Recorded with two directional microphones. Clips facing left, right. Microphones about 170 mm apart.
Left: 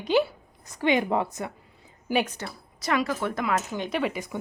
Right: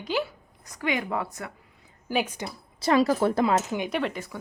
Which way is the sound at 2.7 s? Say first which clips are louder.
Right 5 dB; 30° right (ahead or behind).